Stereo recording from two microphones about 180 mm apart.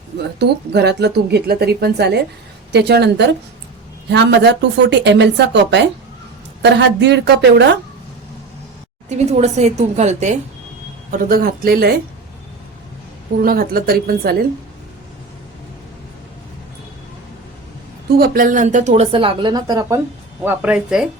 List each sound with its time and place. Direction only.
0.3 s a woman's voice: 65° right (ahead or behind)
9.0 s a woman's voice: 40° right (ahead or behind)
11.1 s speech: 55° right (ahead or behind)
13.4 s speech: 55° right (ahead or behind)
18.2 s a woman's voice: 50° right (ahead or behind); by 20.0 s 20° right (ahead or behind)
20.4 s speech: 10° right (ahead or behind)